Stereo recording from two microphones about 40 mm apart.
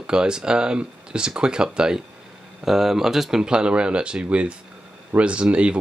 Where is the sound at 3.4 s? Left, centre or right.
Right.